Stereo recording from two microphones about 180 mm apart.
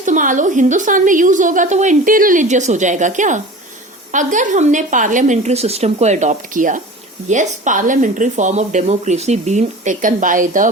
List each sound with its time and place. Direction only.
0.0 s a woman's voice: 45° right (ahead or behind)